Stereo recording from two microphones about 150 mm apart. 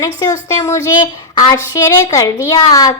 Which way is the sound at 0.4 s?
20° left (ahead or behind).